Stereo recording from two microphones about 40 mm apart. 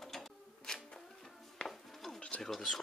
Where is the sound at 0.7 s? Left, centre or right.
Centre.